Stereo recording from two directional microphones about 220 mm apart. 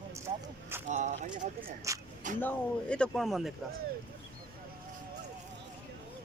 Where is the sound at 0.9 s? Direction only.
35° right (ahead or behind).